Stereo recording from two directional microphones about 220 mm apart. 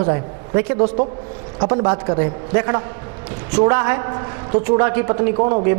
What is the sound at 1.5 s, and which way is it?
A woman's voice, 25° right (ahead or behind).